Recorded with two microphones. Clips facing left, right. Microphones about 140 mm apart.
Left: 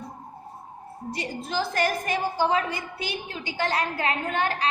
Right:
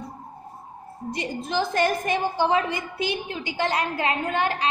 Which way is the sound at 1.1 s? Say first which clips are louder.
Right 3 dB; 20° right (ahead or behind).